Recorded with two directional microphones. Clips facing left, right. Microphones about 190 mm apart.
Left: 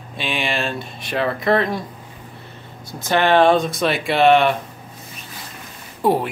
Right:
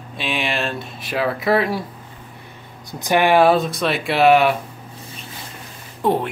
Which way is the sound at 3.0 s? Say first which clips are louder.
Even; 10° right (ahead or behind).